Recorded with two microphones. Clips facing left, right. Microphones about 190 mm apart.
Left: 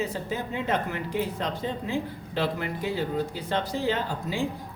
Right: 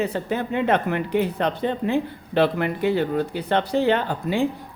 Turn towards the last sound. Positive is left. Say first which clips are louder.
# right 6 dB
turn(degrees=-65)  # may be behind; listen again after turning